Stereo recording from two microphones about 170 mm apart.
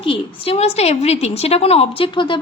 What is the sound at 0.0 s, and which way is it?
A woman's voice, 35° left (ahead or behind).